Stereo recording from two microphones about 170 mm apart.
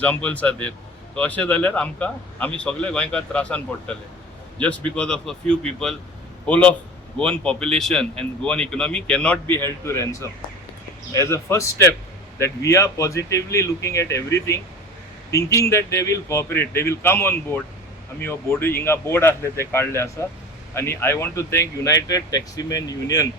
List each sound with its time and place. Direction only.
0.0 s speech: 10° left (ahead or behind)
4.9 s a man's voice: 5° left (ahead or behind); by 23.3 s 20° left (ahead or behind)